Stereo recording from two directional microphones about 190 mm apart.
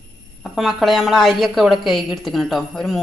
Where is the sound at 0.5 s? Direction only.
Centre (ahead or behind).